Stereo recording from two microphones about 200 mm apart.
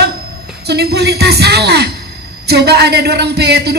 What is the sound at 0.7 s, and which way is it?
Speech, 55° right (ahead or behind).